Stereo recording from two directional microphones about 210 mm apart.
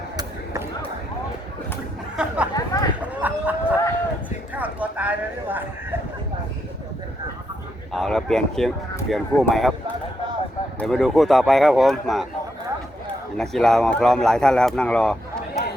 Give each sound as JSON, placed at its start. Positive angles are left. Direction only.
{"t": 2.1, "sound": "chatter", "side_deg": -5}
{"t": 2.7, "sound": "a sound", "side_deg": 20}
{"t": 3.2, "sound": "livestock", "side_deg": -10}
{"t": 4.5, "sound": "a sound", "side_deg": -5}
{"t": 7.9, "sound": "speech", "side_deg": 0}
{"t": 13.3, "sound": "speech", "side_deg": 5}